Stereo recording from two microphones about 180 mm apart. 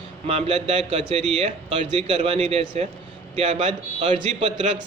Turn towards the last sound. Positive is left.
turn(degrees=-40)  # may be behind; listen again after turning